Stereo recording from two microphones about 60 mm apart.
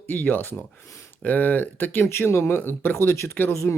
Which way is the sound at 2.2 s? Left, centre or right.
Left.